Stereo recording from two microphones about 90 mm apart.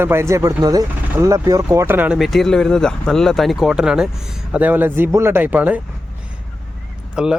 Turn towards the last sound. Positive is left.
turn(degrees=-10)  # may be behind; listen again after turning